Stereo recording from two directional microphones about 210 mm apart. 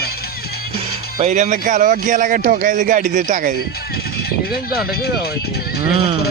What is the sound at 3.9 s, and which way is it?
Speech, 50° left (ahead or behind).